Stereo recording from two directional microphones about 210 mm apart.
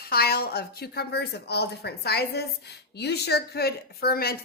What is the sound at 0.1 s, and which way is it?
A woman's voice, 45° left (ahead or behind).